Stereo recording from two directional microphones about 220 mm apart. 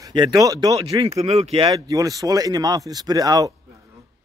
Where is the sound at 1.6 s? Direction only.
15° right (ahead or behind).